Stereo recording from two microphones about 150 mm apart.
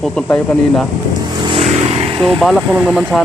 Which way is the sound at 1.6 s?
45° right (ahead or behind).